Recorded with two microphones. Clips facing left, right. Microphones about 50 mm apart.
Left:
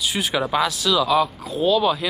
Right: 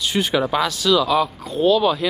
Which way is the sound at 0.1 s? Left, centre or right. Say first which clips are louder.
Right 5 dB; centre.